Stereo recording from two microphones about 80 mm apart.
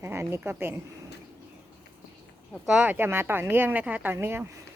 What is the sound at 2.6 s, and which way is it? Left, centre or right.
Speech, centre.